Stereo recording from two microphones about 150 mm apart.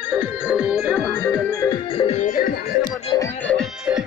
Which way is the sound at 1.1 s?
15° left (ahead or behind).